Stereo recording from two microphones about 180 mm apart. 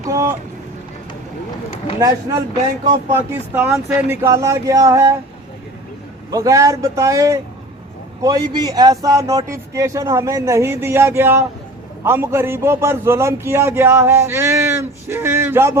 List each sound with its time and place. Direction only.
2.0 s a man's voice: 20° right (ahead or behind)
6.3 s a man's voice: 20° right (ahead or behind)